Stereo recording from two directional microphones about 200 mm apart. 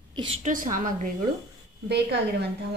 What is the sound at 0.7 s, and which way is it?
Speech, 40° right (ahead or behind).